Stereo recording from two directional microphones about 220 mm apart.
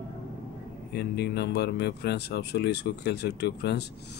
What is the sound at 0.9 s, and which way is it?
Speech, 50° left (ahead or behind).